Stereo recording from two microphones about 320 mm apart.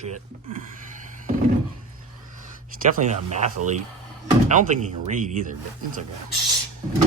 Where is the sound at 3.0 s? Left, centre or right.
Right.